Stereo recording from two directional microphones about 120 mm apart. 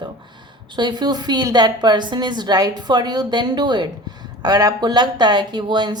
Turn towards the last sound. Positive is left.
turn(degrees=-40)  # may be behind; listen again after turning